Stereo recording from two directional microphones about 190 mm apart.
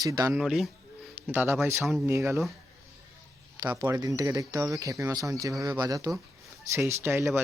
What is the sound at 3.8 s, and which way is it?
Speech, 15° right (ahead or behind).